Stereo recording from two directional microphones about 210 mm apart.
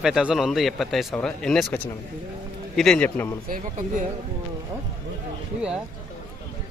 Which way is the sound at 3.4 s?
40° right (ahead or behind).